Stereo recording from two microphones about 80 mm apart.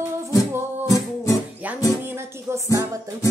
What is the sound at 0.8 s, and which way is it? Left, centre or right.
Music, left.